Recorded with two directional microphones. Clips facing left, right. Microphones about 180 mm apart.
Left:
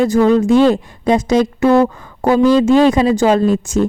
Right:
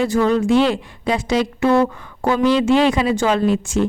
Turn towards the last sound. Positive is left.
turn(degrees=40)  # may be behind; listen again after turning